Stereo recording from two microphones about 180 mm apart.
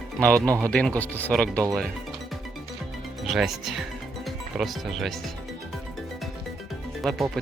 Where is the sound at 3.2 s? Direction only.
Centre (ahead or behind).